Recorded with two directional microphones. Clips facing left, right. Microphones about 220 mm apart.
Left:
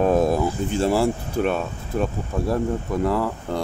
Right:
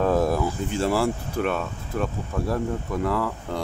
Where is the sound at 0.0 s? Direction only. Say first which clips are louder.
Left 3 dB; 20° left (ahead or behind).